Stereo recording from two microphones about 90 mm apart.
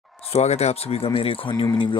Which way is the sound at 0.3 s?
90° left.